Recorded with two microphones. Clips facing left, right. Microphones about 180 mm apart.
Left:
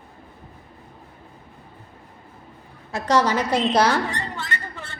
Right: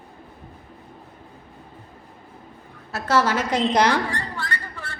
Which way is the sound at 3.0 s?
15° left (ahead or behind).